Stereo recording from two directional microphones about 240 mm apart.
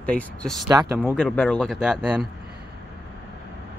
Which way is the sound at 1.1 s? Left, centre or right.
Centre.